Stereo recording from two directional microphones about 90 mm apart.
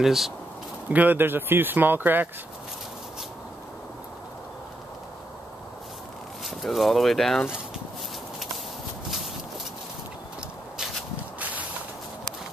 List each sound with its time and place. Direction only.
0.0 s speech: 5° right (ahead or behind)
0.8 s speech: 20° right (ahead or behind)
6.4 s speech: centre (ahead or behind)
11.3 s a sound: 15° right (ahead or behind)